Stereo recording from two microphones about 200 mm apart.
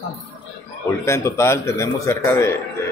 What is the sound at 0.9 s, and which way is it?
Speech, 15° left (ahead or behind).